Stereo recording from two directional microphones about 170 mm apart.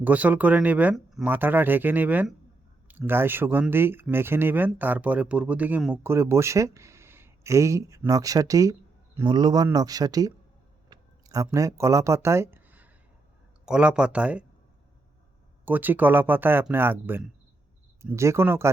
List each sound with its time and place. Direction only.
0.0 s speech: 10° right (ahead or behind)
10.8 s a sound: 20° right (ahead or behind)
13.7 s speech: 5° right (ahead or behind)
15.6 s speech: 10° right (ahead or behind)